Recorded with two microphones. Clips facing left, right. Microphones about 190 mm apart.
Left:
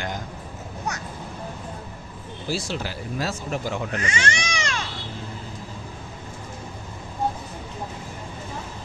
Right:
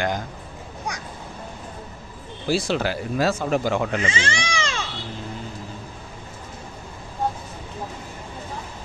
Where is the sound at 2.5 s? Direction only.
80° right.